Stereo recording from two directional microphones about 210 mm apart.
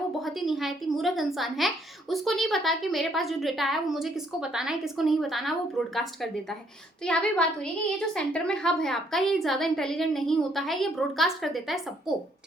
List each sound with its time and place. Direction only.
0.2 s a woman's voice: centre (ahead or behind)